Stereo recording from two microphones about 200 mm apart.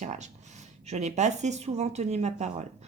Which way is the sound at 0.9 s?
35° right (ahead or behind).